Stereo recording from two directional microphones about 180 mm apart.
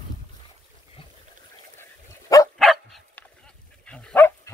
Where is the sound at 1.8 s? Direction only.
20° left (ahead or behind).